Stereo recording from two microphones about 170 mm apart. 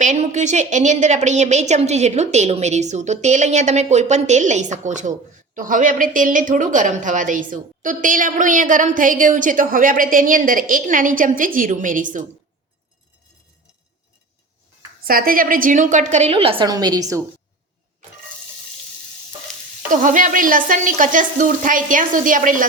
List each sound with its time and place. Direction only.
0.0 s a woman's voice: 45° right (ahead or behind)
15.0 s a woman's voice: 60° right (ahead or behind); by 17.2 s 20° right (ahead or behind)
19.9 s a woman's voice: 50° right (ahead or behind)